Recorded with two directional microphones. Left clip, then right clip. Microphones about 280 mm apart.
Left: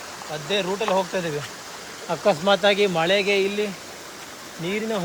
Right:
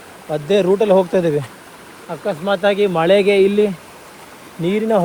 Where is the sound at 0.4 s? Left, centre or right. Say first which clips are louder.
Right 10 dB; centre.